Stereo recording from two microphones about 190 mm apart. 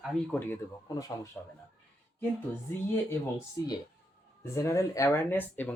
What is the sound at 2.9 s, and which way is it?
Speech, 15° left (ahead or behind).